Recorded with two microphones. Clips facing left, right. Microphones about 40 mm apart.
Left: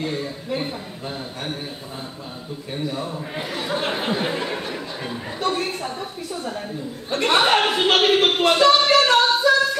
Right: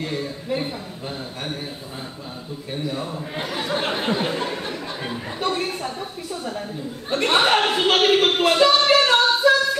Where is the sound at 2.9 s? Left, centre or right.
Centre.